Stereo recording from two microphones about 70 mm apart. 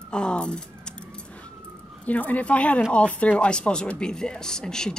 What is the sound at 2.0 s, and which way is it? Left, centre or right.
Speech, left.